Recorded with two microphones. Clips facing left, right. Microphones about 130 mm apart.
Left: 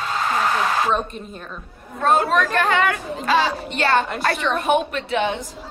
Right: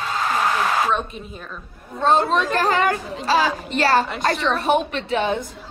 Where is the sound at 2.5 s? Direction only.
35° right (ahead or behind).